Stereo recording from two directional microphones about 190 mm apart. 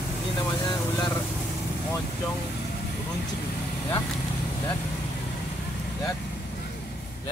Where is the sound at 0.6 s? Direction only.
20° left (ahead or behind).